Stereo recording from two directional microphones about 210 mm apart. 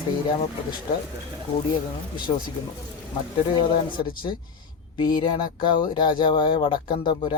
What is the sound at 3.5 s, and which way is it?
Speech, 20° left (ahead or behind).